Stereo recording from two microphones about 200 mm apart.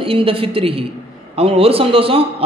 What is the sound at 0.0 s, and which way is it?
A man's voice, 25° right (ahead or behind).